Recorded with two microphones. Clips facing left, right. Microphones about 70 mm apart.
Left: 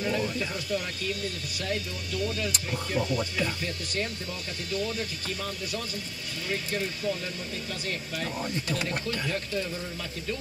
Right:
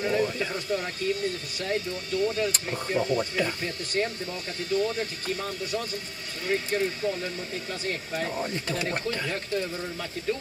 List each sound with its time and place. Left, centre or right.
0.0 s speech: right